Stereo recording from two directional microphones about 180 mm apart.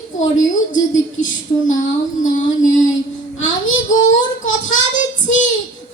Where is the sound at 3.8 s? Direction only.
45° left (ahead or behind).